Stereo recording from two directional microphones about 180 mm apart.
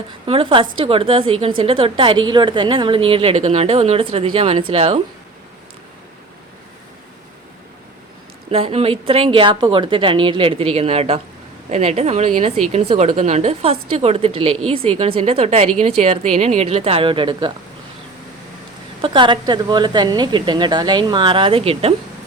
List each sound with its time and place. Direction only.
0.3 s a woman's voice: 30° right (ahead or behind)
8.4 s a woman's voice: 30° right (ahead or behind)
19.0 s a woman's voice: 25° right (ahead or behind)